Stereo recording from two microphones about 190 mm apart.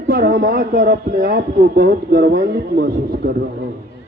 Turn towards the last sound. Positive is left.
turn(degrees=-50)  # may be behind; listen again after turning